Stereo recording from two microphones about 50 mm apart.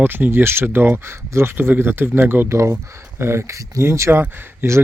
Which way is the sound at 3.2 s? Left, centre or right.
Right.